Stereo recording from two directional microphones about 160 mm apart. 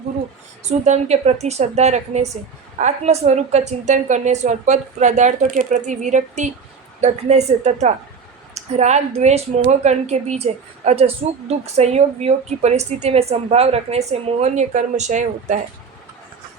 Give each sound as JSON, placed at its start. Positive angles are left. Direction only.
{"t": 0.6, "sound": "speech", "side_deg": -45}